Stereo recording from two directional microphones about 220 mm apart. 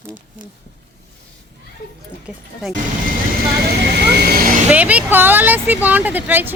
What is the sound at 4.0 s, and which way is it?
Vehicle, 45° right (ahead or behind).